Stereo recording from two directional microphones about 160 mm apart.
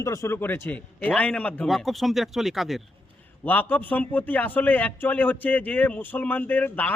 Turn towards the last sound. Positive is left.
turn(degrees=10)  # may be behind; listen again after turning